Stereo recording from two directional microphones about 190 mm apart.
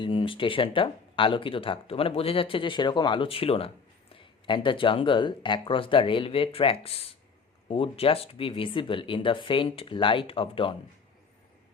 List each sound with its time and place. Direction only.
0.0 s speech: 25° left (ahead or behind)